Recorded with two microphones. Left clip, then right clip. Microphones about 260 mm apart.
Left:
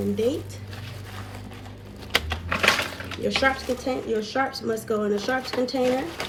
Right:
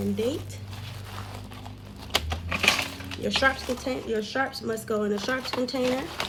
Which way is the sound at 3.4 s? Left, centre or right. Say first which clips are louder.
Left 1 dB; right.